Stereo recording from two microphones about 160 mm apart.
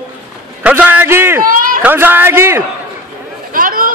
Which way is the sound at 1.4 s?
60° right (ahead or behind).